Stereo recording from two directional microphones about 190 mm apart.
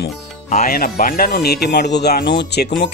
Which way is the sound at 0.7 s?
50° left (ahead or behind).